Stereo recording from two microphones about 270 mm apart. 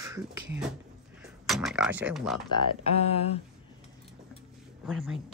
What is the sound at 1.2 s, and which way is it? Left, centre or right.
Speech, centre.